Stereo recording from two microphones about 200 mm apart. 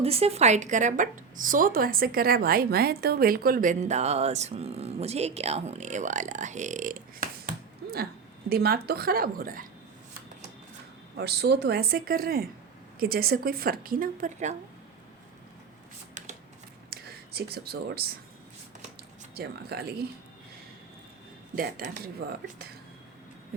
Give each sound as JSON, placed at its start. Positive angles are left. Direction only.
{"t": 0.0, "sound": "a woman's voice", "side_deg": -30}
{"t": 11.2, "sound": "a woman's voice", "side_deg": -55}
{"t": 16.2, "sound": "shuffling cards", "side_deg": -35}
{"t": 16.9, "sound": "speech", "side_deg": -50}
{"t": 19.3, "sound": "a woman's voice", "side_deg": -50}
{"t": 21.5, "sound": "a woman's voice", "side_deg": -45}